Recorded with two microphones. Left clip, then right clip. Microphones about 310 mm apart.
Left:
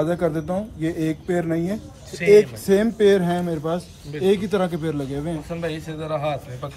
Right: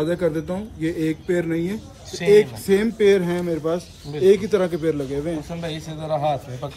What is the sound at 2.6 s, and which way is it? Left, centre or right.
Speech, centre.